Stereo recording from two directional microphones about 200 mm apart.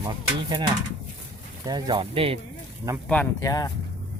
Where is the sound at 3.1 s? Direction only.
10° left (ahead or behind).